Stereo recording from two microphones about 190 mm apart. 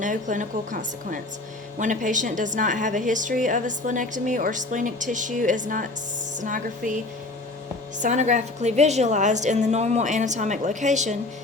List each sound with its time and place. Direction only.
0.0 s a woman's voice: 40° right (ahead or behind)